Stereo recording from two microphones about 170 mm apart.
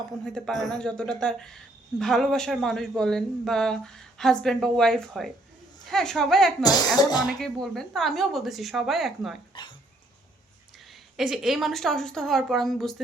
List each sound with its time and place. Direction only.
0.3 s a woman's voice: 5° left (ahead or behind)
6.6 s speech: 25° left (ahead or behind)
7.3 s a woman's voice: centre (ahead or behind)
11.2 s a woman's voice: centre (ahead or behind)